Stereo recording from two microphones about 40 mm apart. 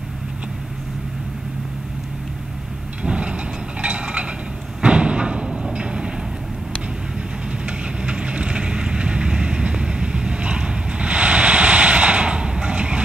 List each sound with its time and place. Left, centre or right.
3.0 s vehicle: right
3.8 s a sound: right
7.6 s vehicle: right